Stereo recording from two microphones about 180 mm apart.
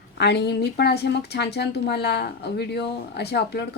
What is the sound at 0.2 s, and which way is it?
A woman's voice, 65° left (ahead or behind).